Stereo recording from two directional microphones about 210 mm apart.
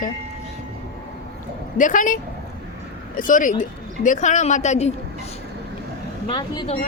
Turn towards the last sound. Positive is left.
turn(degrees=20)  # may be behind; listen again after turning